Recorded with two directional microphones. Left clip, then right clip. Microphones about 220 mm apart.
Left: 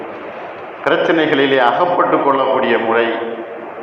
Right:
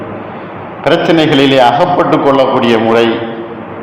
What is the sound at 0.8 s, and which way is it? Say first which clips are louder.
A man's voice: right 5 dB; 50° right (ahead or behind).